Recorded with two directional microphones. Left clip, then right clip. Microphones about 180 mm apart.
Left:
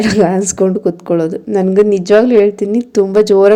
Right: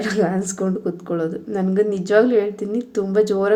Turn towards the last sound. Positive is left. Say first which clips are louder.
# left 10 dB
turn(degrees=45)  # may be behind; listen again after turning